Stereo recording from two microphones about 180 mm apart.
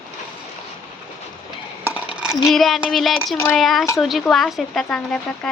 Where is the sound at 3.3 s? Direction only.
15° left (ahead or behind).